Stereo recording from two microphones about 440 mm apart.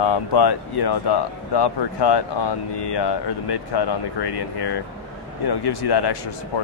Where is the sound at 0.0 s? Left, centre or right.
Left.